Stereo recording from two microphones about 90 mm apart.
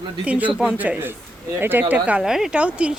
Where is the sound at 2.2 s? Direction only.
5° right (ahead or behind).